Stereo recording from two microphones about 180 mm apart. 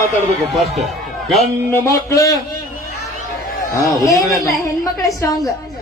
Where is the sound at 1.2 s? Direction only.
Centre (ahead or behind).